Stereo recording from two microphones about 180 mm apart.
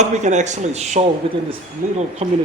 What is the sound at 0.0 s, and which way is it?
Speech, 40° right (ahead or behind).